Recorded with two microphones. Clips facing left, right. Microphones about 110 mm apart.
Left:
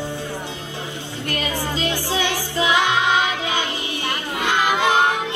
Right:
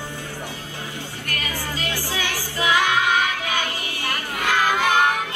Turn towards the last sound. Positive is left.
turn(degrees=20)  # may be behind; listen again after turning